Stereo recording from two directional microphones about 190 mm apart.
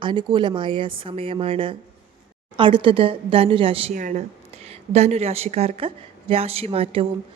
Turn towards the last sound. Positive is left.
turn(degrees=-30)  # may be behind; listen again after turning